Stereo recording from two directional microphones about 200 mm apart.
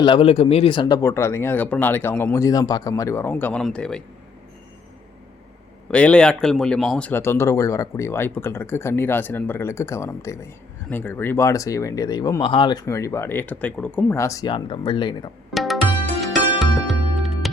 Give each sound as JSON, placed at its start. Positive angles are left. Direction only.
{"t": 0.0, "sound": "speech", "side_deg": 25}
{"t": 5.9, "sound": "speech", "side_deg": 5}
{"t": 15.5, "sound": "music", "side_deg": 0}